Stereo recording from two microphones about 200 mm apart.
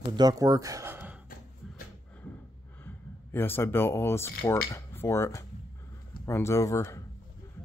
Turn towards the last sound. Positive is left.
turn(degrees=15)  # may be behind; listen again after turning